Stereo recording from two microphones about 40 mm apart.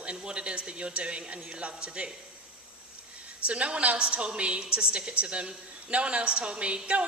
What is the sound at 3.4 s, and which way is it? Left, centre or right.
A woman's voice, right.